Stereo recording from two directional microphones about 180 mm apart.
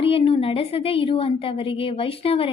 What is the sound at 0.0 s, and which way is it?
A woman's voice, 30° left (ahead or behind).